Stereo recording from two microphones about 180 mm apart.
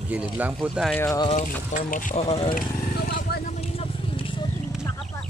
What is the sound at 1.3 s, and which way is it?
Speech, 45° left (ahead or behind).